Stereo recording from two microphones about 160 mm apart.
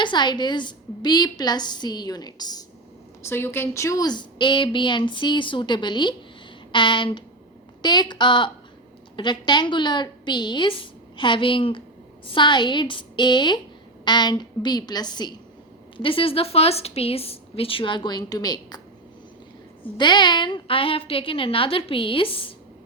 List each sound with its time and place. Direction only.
0.0 s a woman's voice: 30° left (ahead or behind)
3.2 s a woman's voice: 15° left (ahead or behind)
20.0 s a woman's voice: 30° left (ahead or behind)